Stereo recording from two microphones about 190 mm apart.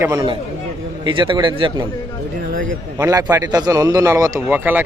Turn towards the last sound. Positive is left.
turn(degrees=-10)  # may be behind; listen again after turning